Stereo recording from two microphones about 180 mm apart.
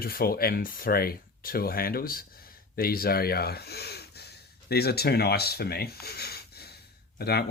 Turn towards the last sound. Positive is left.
turn(degrees=60)  # may be behind; listen again after turning